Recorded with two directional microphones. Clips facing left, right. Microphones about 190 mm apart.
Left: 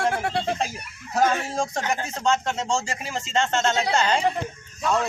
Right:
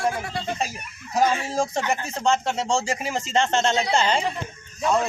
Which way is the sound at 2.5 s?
35° right (ahead or behind).